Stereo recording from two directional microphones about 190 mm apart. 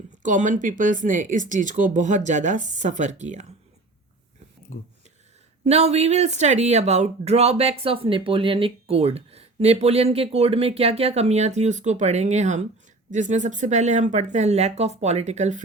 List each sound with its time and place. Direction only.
0.2 s speech: 40° right (ahead or behind)
4.7 s speech: 40° left (ahead or behind)
5.6 s speech: 35° right (ahead or behind)